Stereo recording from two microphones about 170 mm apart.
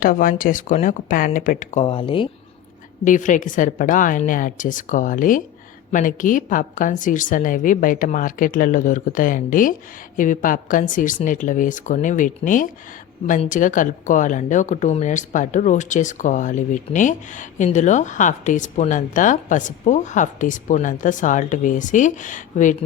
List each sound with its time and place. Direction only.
0.0 s speech: 55° left (ahead or behind); by 2.3 s 30° left (ahead or behind)
3.0 s speech: 50° left (ahead or behind)